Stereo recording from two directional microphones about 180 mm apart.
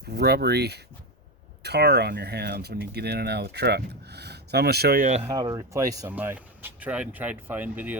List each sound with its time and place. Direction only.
0.1 s speech: 65° right (ahead or behind)
5.3 s speech: 20° right (ahead or behind)